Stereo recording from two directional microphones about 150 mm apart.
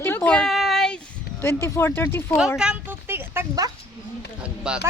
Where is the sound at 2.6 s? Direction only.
10° right (ahead or behind).